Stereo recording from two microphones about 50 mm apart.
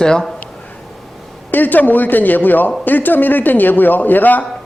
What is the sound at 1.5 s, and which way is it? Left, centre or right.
A man's voice, left.